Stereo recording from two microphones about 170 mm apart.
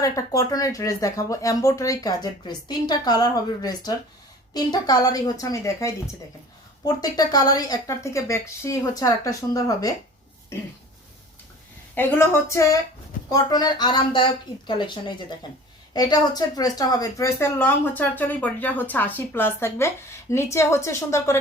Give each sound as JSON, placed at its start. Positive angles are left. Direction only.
{"t": 0.0, "sound": "speech", "side_deg": 20}
{"t": 11.9, "sound": "speech", "side_deg": 10}